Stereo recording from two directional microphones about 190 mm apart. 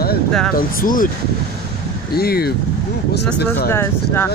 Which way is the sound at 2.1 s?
55° left (ahead or behind).